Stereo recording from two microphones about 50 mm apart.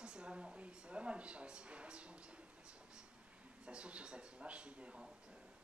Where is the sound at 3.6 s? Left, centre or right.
Right.